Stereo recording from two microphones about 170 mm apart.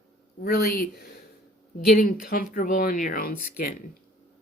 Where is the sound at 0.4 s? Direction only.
65° left (ahead or behind).